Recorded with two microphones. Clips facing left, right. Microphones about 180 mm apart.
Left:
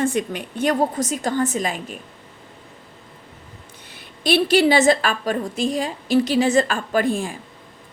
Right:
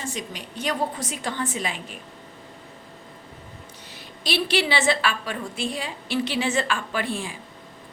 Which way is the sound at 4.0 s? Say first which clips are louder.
Left 8 dB; 50° left (ahead or behind).